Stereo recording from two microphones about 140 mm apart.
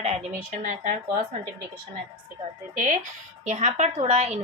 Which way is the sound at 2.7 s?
65° right (ahead or behind).